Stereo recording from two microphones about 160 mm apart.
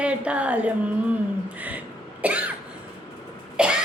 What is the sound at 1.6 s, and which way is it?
Cough, 10° right (ahead or behind).